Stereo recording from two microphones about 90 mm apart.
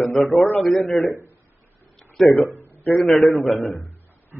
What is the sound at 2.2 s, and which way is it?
Speech, centre (ahead or behind).